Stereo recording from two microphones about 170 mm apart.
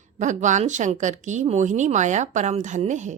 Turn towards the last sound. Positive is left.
turn(degrees=-45)  # may be behind; listen again after turning